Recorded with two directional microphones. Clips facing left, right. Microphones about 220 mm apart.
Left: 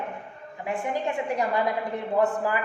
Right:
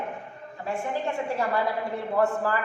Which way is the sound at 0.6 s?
15° left (ahead or behind).